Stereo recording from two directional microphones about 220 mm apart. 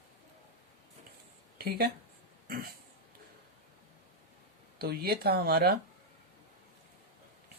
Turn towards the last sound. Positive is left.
turn(degrees=-45)  # may be behind; listen again after turning